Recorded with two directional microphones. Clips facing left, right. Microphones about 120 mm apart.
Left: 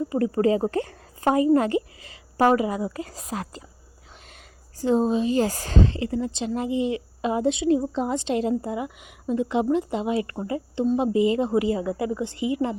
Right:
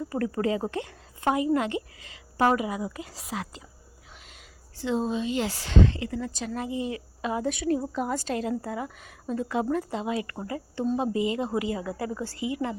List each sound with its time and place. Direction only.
0.1 s a woman's voice: 25° left (ahead or behind); by 3.6 s 45° left (ahead or behind)
4.8 s speech: 40° left (ahead or behind)
8.7 s speech: 15° left (ahead or behind)